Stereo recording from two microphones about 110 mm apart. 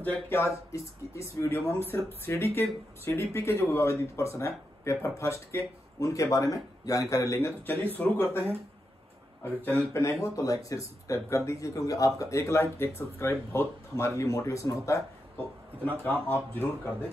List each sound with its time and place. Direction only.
0.0 s a man's voice: 20° left (ahead or behind)
10.2 s speech: 30° left (ahead or behind)
15.3 s speech: 15° left (ahead or behind)